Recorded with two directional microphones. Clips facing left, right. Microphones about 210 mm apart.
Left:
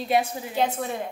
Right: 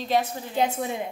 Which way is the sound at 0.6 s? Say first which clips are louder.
Right 1 dB; 10° right (ahead or behind).